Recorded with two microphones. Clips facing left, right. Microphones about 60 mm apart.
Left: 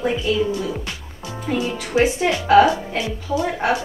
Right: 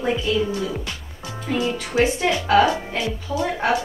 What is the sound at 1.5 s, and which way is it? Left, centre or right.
Speech, centre.